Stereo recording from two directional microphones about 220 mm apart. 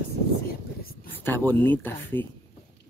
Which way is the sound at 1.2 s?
10° left (ahead or behind).